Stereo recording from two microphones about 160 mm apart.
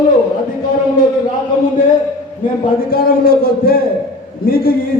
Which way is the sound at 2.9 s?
65° left (ahead or behind).